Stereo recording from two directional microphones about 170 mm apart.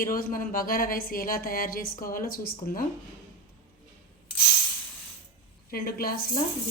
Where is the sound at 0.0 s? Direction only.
55° left (ahead or behind).